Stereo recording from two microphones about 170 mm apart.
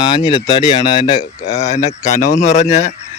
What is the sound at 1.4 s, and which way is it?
Speech, 45° left (ahead or behind).